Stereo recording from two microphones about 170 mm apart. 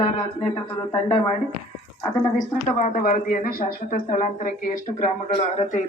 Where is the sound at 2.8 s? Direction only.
50° left (ahead or behind).